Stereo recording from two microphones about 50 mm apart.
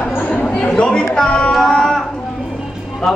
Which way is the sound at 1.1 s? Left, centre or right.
Centre.